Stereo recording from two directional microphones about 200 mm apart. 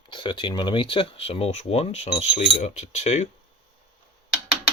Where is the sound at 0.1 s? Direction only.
25° left (ahead or behind).